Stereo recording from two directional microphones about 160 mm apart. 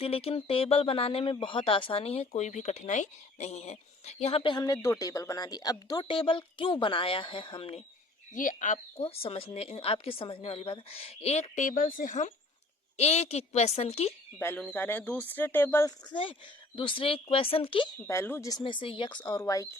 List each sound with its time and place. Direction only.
0.0 s speech: 40° left (ahead or behind)
8.4 s speech: 55° left (ahead or behind)
9.0 s speech: 35° left (ahead or behind)
13.0 s speech: 40° left (ahead or behind)
14.3 s speech: 10° left (ahead or behind)
16.0 s speech: 30° left (ahead or behind)
18.0 s speech: 15° left (ahead or behind)